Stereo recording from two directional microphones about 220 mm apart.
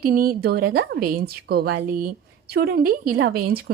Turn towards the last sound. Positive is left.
turn(degrees=-45)  # may be behind; listen again after turning